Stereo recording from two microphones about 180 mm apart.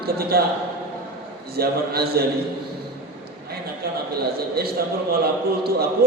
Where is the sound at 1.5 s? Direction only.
60° right (ahead or behind).